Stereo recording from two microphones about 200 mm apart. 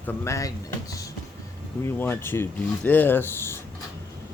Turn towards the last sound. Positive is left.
turn(degrees=10)  # may be behind; listen again after turning